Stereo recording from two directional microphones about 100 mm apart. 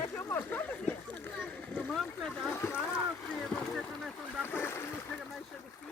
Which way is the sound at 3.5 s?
10° left (ahead or behind).